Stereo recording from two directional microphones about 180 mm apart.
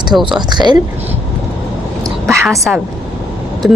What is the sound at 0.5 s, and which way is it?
Speech, 25° right (ahead or behind).